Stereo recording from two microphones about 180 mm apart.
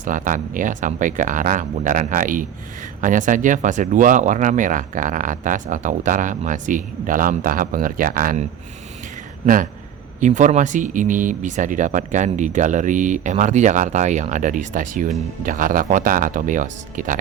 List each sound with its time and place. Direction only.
0.0 s speech: 45° right (ahead or behind)
10.2 s speech: 45° right (ahead or behind)